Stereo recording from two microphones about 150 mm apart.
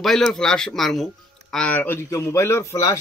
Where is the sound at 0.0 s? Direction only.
Centre (ahead or behind).